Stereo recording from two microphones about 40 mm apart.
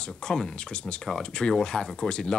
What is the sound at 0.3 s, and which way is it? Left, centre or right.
Speech, left.